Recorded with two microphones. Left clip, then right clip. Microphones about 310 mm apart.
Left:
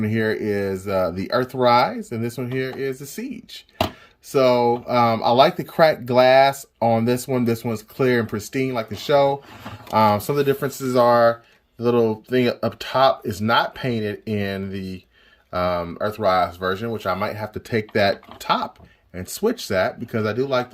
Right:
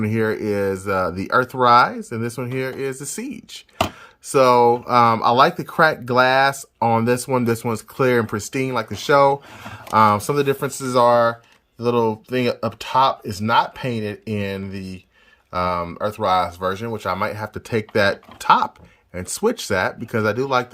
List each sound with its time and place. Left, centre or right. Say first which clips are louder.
0.0 s speech: right 1 dB; centre